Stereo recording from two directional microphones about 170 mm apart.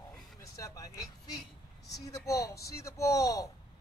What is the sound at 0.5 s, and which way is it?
Vehicle, 20° left (ahead or behind).